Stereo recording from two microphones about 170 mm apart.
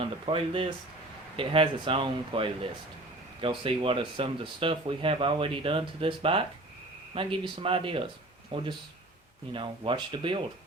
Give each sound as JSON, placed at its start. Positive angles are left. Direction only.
{"t": 0.0, "sound": "speech", "side_deg": -30}